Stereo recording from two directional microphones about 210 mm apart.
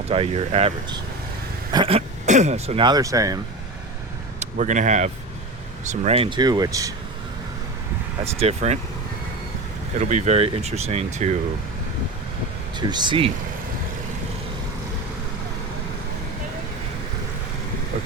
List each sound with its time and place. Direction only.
0.1 s speech: 25° right (ahead or behind)
4.4 s speech: 35° right (ahead or behind); by 6.9 s 15° right (ahead or behind)
8.2 s speech: 30° right (ahead or behind)
10.0 s speech: 35° right (ahead or behind)
12.7 s speech: 20° right (ahead or behind)